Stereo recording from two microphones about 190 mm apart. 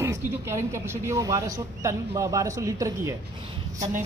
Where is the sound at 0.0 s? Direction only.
15° right (ahead or behind).